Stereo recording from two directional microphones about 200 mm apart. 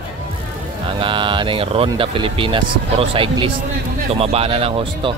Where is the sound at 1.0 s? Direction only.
25° right (ahead or behind).